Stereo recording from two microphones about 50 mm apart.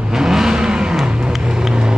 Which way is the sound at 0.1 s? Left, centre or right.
Centre.